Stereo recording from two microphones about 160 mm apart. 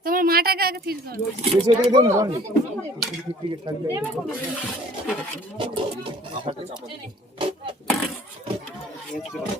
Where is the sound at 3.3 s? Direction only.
35° right (ahead or behind).